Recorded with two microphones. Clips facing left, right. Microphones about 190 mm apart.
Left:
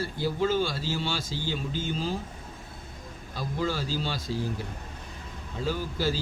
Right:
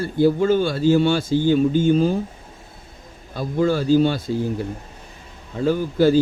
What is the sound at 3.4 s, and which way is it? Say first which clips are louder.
Speech: right 10 dB; 55° right (ahead or behind).